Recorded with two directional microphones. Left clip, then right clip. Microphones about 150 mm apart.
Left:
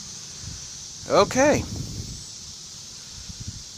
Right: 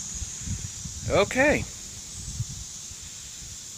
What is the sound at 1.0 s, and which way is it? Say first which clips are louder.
Speech: left 3 dB; 20° left (ahead or behind).